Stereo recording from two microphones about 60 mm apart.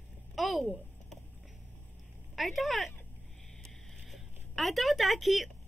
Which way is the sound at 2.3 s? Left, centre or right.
Centre.